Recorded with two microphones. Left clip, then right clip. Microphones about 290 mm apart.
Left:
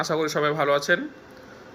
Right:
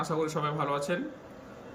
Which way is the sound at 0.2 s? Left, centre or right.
Centre.